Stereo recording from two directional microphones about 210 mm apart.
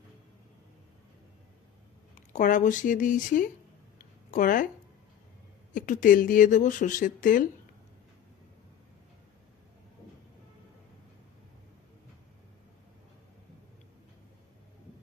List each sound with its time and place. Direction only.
2.1 s speech: 40° left (ahead or behind)
3.9 s a sound: 40° left (ahead or behind)
5.7 s speech: 40° left (ahead or behind)